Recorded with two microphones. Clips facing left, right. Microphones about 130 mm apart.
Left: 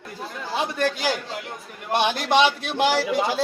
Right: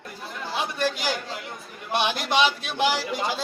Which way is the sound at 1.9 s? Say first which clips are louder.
Left 4 dB; 55° left (ahead or behind).